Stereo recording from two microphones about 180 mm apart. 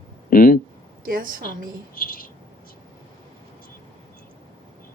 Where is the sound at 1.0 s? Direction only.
50° right (ahead or behind).